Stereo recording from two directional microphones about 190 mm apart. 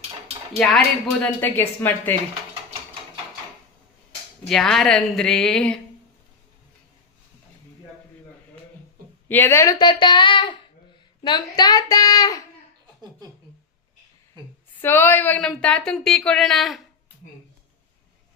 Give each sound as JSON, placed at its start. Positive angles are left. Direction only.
{"t": 0.5, "sound": "a woman's voice", "side_deg": 0}
{"t": 4.4, "sound": "speech", "side_deg": 0}
{"t": 9.3, "sound": "speech", "side_deg": 10}
{"t": 14.8, "sound": "speech", "side_deg": 10}